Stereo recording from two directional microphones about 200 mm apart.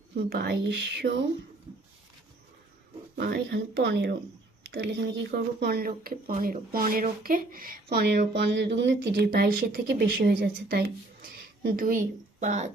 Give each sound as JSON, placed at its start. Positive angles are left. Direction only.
{"t": 0.2, "sound": "speech", "side_deg": -50}
{"t": 3.2, "sound": "speech", "side_deg": -55}